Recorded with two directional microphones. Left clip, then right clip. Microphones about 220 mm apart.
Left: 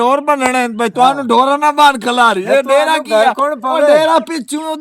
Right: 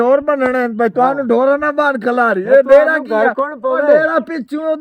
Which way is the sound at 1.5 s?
5° right (ahead or behind).